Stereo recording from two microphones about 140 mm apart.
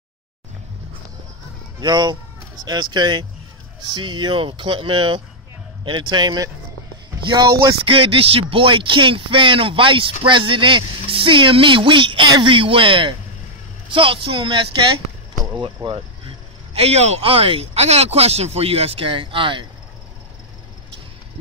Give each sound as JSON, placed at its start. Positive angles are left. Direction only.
{"t": 1.8, "sound": "speech", "side_deg": -30}
{"t": 7.8, "sound": "speech", "side_deg": -40}